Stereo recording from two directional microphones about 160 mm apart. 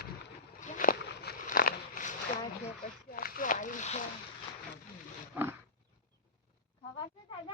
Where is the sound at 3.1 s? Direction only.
65° left (ahead or behind); by 4.0 s 50° left (ahead or behind).